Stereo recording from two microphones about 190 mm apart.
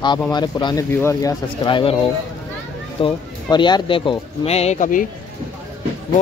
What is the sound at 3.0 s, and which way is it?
Speech, 25° left (ahead or behind).